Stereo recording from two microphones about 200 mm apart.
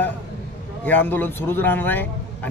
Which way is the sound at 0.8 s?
10° left (ahead or behind).